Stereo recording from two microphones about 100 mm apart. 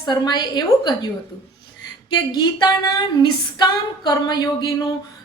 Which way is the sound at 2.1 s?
50° left (ahead or behind).